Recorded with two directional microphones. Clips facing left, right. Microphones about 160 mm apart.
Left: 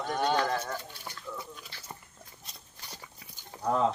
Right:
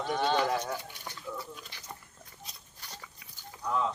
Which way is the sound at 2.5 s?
Centre (ahead or behind).